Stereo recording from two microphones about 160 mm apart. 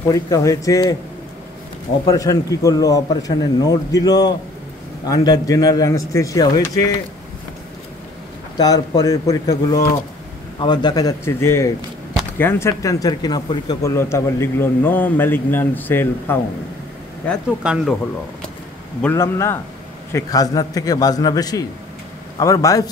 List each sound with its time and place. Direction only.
0.1 s speech: 20° left (ahead or behind)
2.0 s speech: 20° left (ahead or behind)
8.5 s speech: 25° left (ahead or behind)
17.6 s speech: 5° right (ahead or behind)
18.9 s speech: 15° left (ahead or behind)